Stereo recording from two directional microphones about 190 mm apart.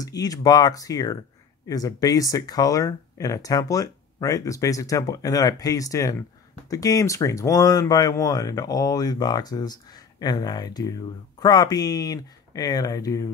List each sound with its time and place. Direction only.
0.0 s speech: 20° left (ahead or behind)